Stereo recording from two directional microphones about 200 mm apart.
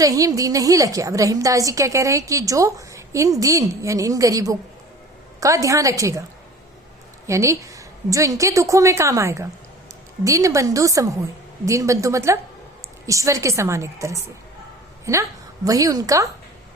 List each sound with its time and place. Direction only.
0.0 s a woman's voice: 15° right (ahead or behind)
7.3 s a woman's voice: 15° right (ahead or behind)